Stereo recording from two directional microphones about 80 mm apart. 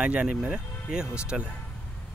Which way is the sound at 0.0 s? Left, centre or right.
Centre.